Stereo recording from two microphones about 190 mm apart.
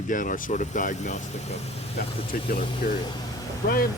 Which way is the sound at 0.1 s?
45° left (ahead or behind).